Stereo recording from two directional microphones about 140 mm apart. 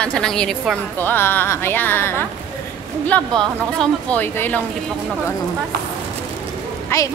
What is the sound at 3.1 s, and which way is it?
Speech, 5° left (ahead or behind).